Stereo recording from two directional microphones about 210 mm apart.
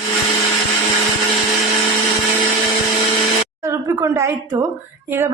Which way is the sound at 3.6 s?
15° right (ahead or behind).